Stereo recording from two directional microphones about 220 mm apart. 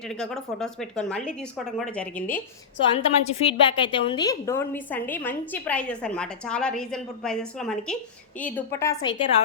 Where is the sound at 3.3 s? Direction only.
25° left (ahead or behind).